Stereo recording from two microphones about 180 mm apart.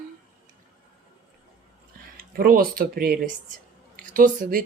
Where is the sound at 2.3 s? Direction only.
55° right (ahead or behind).